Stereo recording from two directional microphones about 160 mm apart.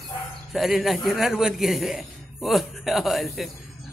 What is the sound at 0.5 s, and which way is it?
A man's voice, centre (ahead or behind).